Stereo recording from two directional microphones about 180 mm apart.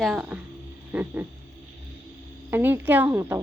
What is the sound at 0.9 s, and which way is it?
Speech, 10° right (ahead or behind).